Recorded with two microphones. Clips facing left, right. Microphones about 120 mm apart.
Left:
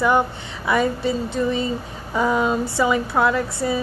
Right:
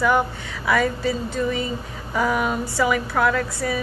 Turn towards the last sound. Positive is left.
turn(degrees=25)  # may be behind; listen again after turning